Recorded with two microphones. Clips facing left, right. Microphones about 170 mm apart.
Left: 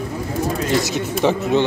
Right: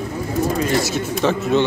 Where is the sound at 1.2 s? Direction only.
15° left (ahead or behind).